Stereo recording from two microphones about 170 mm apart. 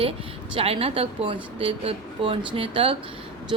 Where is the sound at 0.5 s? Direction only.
35° right (ahead or behind).